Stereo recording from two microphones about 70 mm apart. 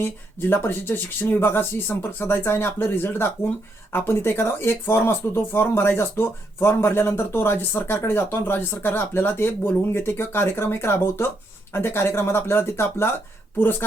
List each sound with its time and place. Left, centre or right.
0.0 s speech: left